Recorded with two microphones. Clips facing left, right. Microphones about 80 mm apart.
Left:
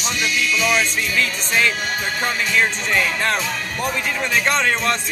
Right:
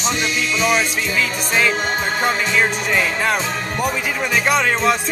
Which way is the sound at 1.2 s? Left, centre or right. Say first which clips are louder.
Right 1 dB; centre.